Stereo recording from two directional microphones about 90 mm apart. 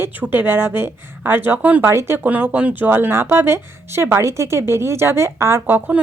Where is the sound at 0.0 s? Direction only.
20° right (ahead or behind).